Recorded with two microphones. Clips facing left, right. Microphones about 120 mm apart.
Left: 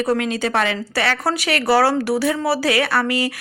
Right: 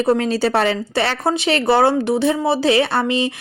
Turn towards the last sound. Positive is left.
turn(degrees=-25)  # may be behind; listen again after turning